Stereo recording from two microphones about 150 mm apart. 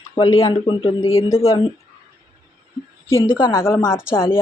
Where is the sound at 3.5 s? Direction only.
15° left (ahead or behind).